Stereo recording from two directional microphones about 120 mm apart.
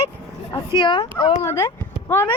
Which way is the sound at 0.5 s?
40° left (ahead or behind).